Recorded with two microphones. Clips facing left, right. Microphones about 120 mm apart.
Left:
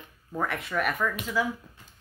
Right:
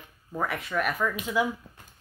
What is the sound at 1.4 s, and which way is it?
Speech, 15° right (ahead or behind).